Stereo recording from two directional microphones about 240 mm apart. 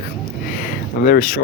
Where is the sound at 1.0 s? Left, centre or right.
Left.